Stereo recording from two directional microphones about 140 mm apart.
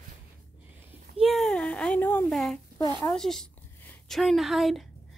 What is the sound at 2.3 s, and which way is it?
A woman's voice, centre (ahead or behind).